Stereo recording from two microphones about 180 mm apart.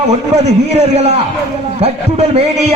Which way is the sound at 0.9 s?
35° right (ahead or behind).